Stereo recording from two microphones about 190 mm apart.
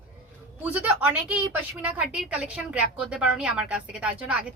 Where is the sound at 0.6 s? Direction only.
10° right (ahead or behind).